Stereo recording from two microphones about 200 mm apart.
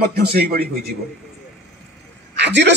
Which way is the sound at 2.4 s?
60° right (ahead or behind).